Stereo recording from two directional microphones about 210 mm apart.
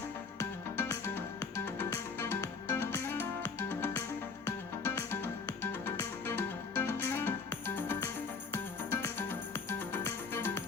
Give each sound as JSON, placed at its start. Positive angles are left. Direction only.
{"t": 0.3, "sound": "music", "side_deg": 10}